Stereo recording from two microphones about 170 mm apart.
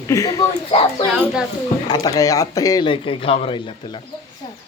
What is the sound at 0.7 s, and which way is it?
Speech, 35° left (ahead or behind).